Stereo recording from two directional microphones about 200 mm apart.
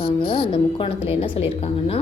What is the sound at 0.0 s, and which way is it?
A woman's voice, 25° left (ahead or behind).